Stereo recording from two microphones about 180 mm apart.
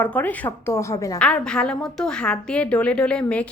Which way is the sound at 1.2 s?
5° left (ahead or behind).